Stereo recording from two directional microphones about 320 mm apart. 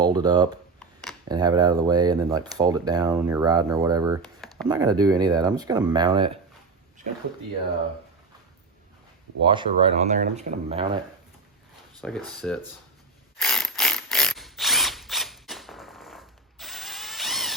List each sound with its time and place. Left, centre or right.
0.0 s speech: centre
9.4 s speech: centre
11.9 s speech: centre
13.4 s ratchet: centre